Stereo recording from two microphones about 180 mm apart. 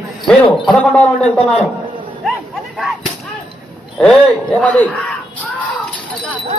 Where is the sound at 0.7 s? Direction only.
5° left (ahead or behind).